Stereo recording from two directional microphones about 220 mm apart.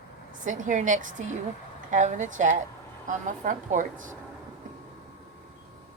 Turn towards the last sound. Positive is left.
turn(degrees=-35)  # may be behind; listen again after turning